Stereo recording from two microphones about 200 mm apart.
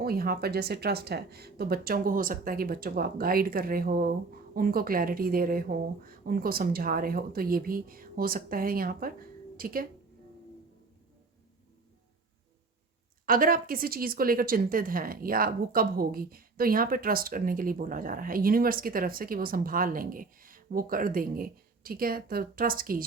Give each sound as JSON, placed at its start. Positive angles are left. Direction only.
{"t": 0.0, "sound": "a woman's voice", "side_deg": -50}
{"t": 13.2, "sound": "a woman's voice", "side_deg": -45}